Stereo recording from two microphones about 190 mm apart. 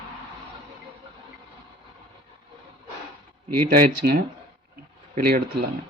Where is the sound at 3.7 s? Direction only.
50° right (ahead or behind).